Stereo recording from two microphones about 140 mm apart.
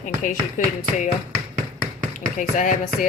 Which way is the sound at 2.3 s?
65° left (ahead or behind).